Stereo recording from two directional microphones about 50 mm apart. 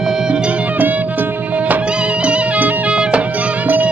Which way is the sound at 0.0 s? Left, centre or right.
Centre.